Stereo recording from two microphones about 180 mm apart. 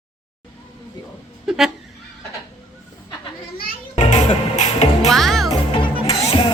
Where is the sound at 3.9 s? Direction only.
40° left (ahead or behind).